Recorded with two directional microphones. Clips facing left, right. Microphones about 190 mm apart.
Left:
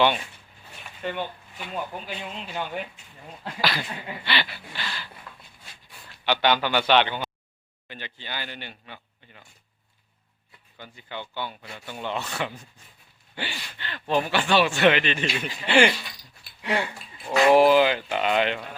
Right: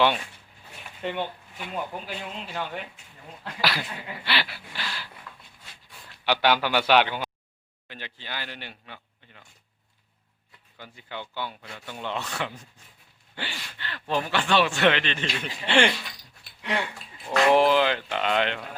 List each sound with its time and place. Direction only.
1.0 s speech: 20° right (ahead or behind)
1.5 s a man's voice: 5° right (ahead or behind)
5.3 s dog: 30° left (ahead or behind)
6.1 s a man's voice: 5° right (ahead or behind)
10.8 s a man's voice: centre (ahead or behind)